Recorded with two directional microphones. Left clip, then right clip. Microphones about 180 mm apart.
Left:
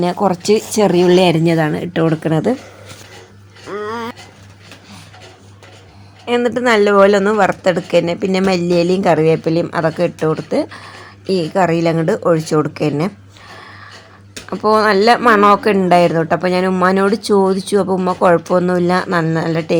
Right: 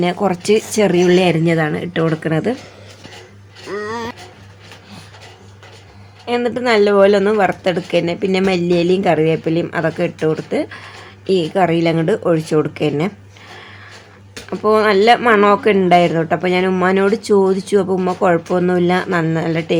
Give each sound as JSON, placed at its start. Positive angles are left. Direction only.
{"t": 0.0, "sound": "speech", "side_deg": 10}
{"t": 3.7, "sound": "music", "side_deg": 0}
{"t": 6.2, "sound": "speech", "side_deg": 10}
{"t": 13.6, "sound": "a sound", "side_deg": 10}
{"t": 14.5, "sound": "speech", "side_deg": 10}